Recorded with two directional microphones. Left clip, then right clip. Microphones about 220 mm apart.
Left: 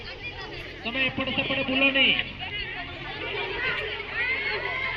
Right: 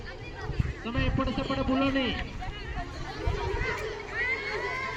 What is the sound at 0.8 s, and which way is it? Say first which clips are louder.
A man's voice: left 5 dB; 45° right (ahead or behind).